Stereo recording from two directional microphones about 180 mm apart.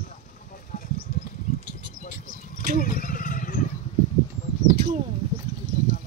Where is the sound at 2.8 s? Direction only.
50° left (ahead or behind).